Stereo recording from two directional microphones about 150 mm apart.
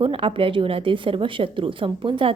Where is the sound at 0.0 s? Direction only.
35° right (ahead or behind).